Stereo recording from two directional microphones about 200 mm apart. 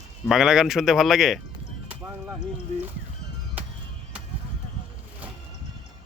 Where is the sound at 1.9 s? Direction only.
5° right (ahead or behind).